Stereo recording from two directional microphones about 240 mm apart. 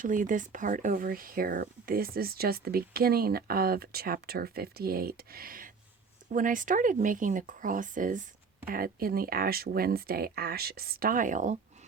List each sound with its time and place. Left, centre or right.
0.0 s speech: right